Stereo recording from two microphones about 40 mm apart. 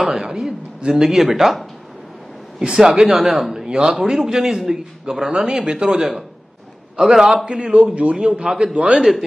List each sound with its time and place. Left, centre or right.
0.0 s a man's voice: centre
2.7 s a man's voice: centre
3.5 s a man's voice: centre
5.9 s a man's voice: centre
7.0 s a man's voice: centre
7.7 s speech: right
8.2 s a man's voice: centre